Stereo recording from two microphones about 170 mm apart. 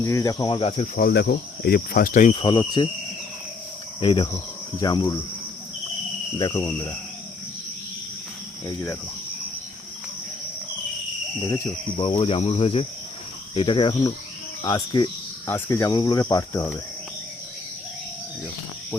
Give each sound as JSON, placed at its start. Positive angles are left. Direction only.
{"t": 0.0, "sound": "speech", "side_deg": 20}
{"t": 0.9, "sound": "cricket", "side_deg": 65}
{"t": 2.3, "sound": "speech", "side_deg": 30}
{"t": 4.0, "sound": "speech", "side_deg": 30}
{"t": 6.4, "sound": "speech", "side_deg": 20}
{"t": 8.6, "sound": "speech", "side_deg": 15}
{"t": 11.4, "sound": "speech", "side_deg": 20}
{"t": 11.9, "sound": "speech", "side_deg": 35}